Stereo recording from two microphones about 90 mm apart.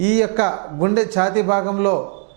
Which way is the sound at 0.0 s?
15° right (ahead or behind).